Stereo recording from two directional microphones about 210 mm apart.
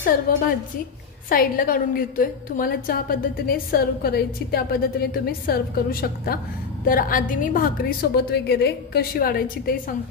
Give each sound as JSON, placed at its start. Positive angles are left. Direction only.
{"t": 1.3, "sound": "a woman's voice", "side_deg": 45}